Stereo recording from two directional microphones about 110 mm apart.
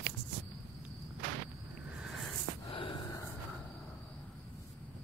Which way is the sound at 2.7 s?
50° left (ahead or behind).